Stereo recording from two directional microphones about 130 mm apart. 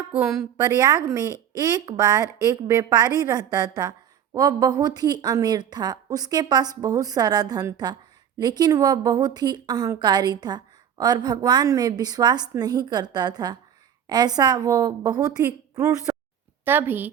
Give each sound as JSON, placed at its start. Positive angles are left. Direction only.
{"t": 0.1, "sound": "a woman's voice", "side_deg": -20}
{"t": 16.1, "sound": "a sound", "side_deg": -15}
{"t": 16.6, "sound": "a woman's voice", "side_deg": -15}